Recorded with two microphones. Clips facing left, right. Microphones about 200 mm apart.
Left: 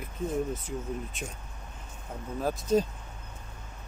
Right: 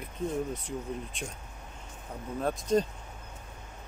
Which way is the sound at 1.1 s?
5° left (ahead or behind).